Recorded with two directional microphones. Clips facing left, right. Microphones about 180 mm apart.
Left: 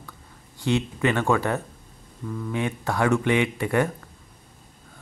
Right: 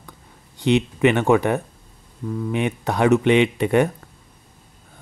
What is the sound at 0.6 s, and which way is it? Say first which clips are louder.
Speech: right 6 dB; 20° right (ahead or behind).